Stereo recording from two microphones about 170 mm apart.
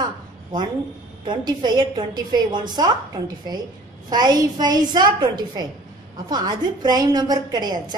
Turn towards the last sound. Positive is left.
turn(degrees=-25)  # may be behind; listen again after turning